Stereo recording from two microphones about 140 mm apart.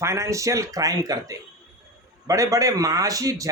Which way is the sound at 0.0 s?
20° right (ahead or behind).